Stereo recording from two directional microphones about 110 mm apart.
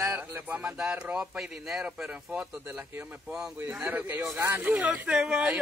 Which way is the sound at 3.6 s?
15° right (ahead or behind).